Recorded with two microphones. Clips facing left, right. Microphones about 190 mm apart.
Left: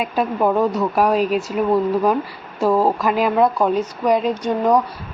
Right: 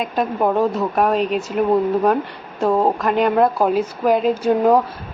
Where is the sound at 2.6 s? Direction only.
25° right (ahead or behind).